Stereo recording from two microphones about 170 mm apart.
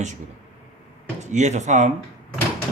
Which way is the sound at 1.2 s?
45° right (ahead or behind).